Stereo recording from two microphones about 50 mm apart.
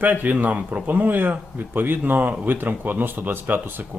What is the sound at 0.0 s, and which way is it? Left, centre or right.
Speech, right.